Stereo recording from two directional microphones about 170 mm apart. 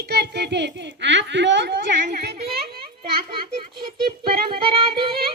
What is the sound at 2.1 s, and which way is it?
Children playing, 70° right (ahead or behind).